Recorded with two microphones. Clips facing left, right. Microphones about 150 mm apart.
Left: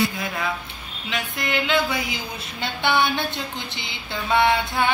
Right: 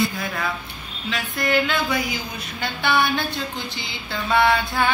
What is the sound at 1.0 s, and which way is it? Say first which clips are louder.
Speech: right 3 dB; 20° left (ahead or behind).